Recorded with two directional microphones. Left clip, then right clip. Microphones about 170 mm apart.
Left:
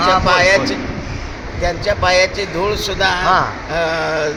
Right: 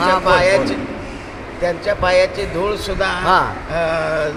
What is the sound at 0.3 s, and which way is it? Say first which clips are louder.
Speech: left 1 dB; 10° left (ahead or behind).